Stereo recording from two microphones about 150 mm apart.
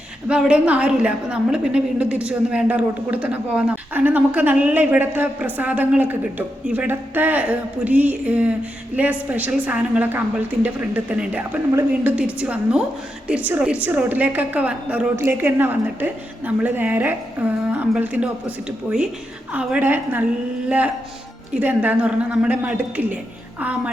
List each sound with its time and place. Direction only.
0.3 s a woman's voice: 5° right (ahead or behind)
12.1 s a woman's voice: 5° right (ahead or behind)